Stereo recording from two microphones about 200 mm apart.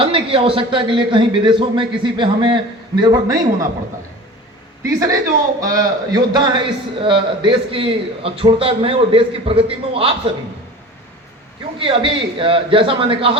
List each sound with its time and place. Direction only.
0.0 s a man's voice: 25° right (ahead or behind)
4.8 s a man's voice: 15° right (ahead or behind)
11.8 s a man's voice: 25° right (ahead or behind)